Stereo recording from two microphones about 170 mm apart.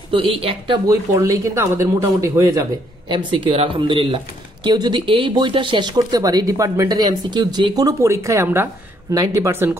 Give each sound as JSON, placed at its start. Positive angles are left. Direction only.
{"t": 0.1, "sound": "speech", "side_deg": -35}
{"t": 0.8, "sound": "speech", "side_deg": -20}
{"t": 3.1, "sound": "speech", "side_deg": -30}